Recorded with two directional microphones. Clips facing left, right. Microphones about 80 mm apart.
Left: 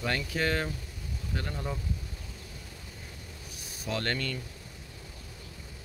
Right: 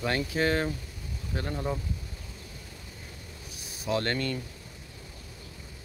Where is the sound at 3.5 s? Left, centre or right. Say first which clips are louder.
Right 5 dB; centre.